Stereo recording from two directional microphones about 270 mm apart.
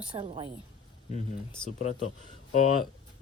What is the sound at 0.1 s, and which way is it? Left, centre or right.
Speech, centre.